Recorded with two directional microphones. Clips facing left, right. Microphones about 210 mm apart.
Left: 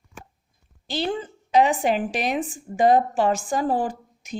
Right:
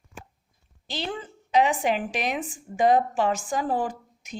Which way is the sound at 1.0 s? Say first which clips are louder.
Left 6 dB; 40° left (ahead or behind).